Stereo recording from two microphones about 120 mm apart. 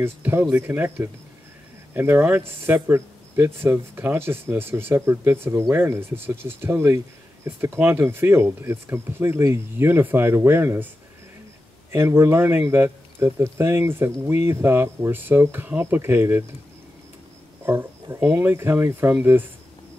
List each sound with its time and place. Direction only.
0.0 s speech: 20° right (ahead or behind)
11.9 s speech: 20° right (ahead or behind)
17.6 s speech: 20° right (ahead or behind)